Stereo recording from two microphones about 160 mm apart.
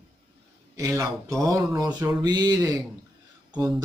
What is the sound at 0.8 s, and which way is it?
Speech, 20° right (ahead or behind).